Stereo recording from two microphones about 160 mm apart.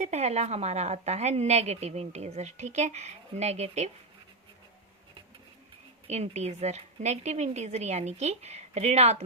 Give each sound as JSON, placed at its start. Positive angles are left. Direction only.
{"t": 0.0, "sound": "a woman's voice", "side_deg": -45}
{"t": 6.1, "sound": "a woman's voice", "side_deg": -45}